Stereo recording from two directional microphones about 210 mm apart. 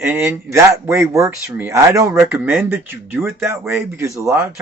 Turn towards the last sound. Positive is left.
turn(degrees=-10)  # may be behind; listen again after turning